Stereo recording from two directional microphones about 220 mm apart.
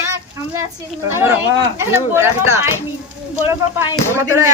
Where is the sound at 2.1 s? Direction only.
10° right (ahead or behind).